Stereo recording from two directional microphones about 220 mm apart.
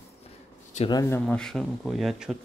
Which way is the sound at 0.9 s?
15° left (ahead or behind).